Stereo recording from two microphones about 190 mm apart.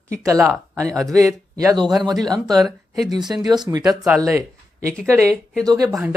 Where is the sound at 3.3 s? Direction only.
20° right (ahead or behind).